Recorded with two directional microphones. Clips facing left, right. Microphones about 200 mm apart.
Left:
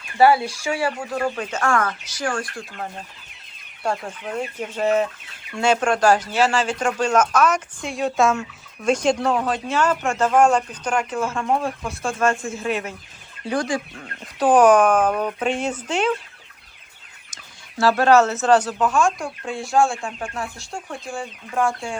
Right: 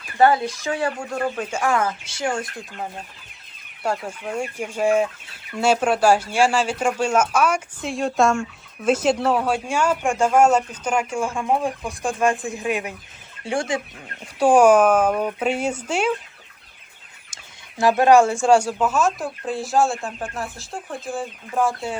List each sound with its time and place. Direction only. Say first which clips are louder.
0.2 s speech: left 1 dB; 10° left (ahead or behind); by 2.5 s 25° right (ahead or behind)
2.5 s speech: even; 5° right (ahead or behind)
13.4 s fowl: left 1 dB; 25° right (ahead or behind)
14.0 s speech: right 4 dB; 10° right (ahead or behind)
17.7 s speech: right 1 dB; 15° right (ahead or behind)